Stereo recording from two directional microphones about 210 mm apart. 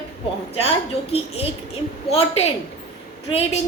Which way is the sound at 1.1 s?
30° left (ahead or behind).